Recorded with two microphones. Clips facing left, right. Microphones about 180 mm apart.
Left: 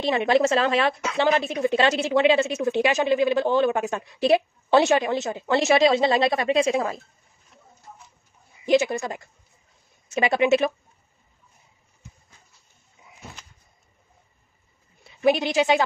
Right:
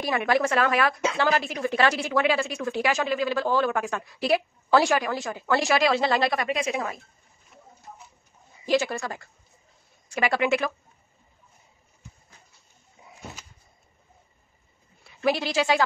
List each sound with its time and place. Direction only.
0.0 s a woman's voice: 25° left (ahead or behind)
8.6 s a woman's voice: 20° left (ahead or behind)
15.0 s speech: 20° left (ahead or behind)